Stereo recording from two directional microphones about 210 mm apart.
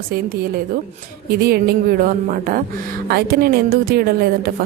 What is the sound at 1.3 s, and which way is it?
A woman's voice, 45° right (ahead or behind).